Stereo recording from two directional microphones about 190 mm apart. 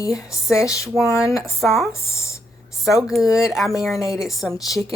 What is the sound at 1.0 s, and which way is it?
Speech, 15° left (ahead or behind).